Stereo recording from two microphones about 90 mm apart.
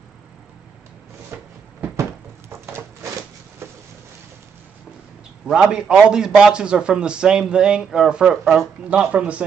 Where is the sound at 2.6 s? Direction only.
30° right (ahead or behind).